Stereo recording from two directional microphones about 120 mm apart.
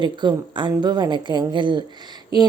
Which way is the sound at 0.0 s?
40° right (ahead or behind).